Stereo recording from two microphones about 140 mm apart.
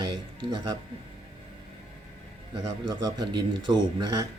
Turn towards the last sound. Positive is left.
turn(degrees=-30)  # may be behind; listen again after turning